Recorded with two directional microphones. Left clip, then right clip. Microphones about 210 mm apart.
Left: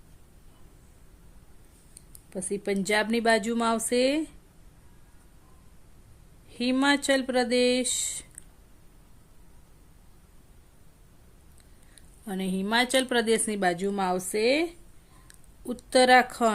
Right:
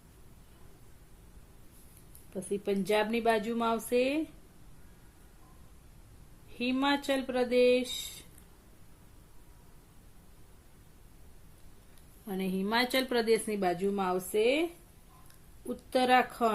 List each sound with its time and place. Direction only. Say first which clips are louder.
2.3 s speech: left 3 dB; 40° left (ahead or behind)
6.6 s speech: left 5 dB; 40° left (ahead or behind)
12.2 s speech: left 2 dB; 30° left (ahead or behind)